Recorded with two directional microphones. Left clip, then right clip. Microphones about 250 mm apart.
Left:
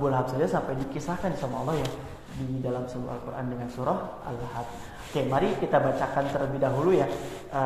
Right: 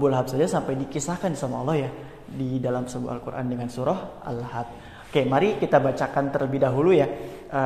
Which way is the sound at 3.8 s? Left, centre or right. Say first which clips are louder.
Right 3 dB; right.